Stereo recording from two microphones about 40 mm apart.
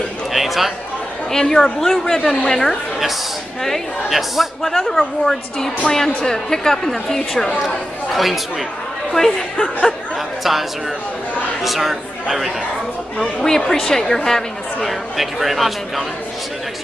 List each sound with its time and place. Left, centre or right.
0.3 s a sound: centre
1.3 s a woman's voice: centre
4.6 s a woman's voice: centre
7.6 s speech: centre
9.1 s a woman's voice: centre
11.6 s speech: centre
13.2 s a woman's voice: centre